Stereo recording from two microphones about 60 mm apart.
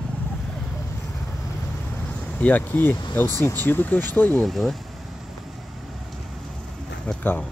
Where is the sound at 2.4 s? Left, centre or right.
Left.